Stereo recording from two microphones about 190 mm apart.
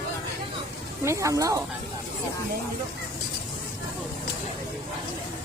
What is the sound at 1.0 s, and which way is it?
Speech, 15° right (ahead or behind).